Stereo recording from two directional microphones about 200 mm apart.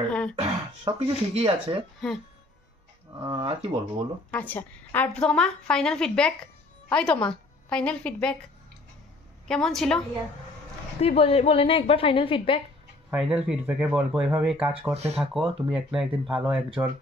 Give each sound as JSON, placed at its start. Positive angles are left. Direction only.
{"t": 0.1, "sound": "a sound", "side_deg": 5}
{"t": 0.4, "sound": "speech", "side_deg": -30}
{"t": 3.2, "sound": "speech", "side_deg": -25}
{"t": 4.3, "sound": "a woman's voice", "side_deg": 10}
{"t": 9.5, "sound": "a woman's voice", "side_deg": 0}
{"t": 11.0, "sound": "a woman's voice", "side_deg": 30}
{"t": 13.1, "sound": "a woman's voice", "side_deg": -5}